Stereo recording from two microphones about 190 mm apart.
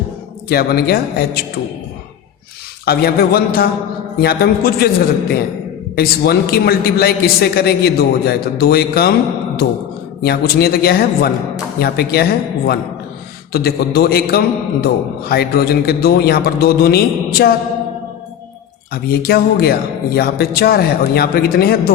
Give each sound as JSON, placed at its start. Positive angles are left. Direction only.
{"t": 0.4, "sound": "a man's voice", "side_deg": 55}
{"t": 2.8, "sound": "a man's voice", "side_deg": 55}
{"t": 6.0, "sound": "a man's voice", "side_deg": 55}
{"t": 10.2, "sound": "a man's voice", "side_deg": 55}
{"t": 18.9, "sound": "speech", "side_deg": 55}